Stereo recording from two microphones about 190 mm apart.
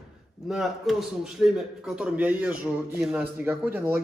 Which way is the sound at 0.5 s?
Centre (ahead or behind).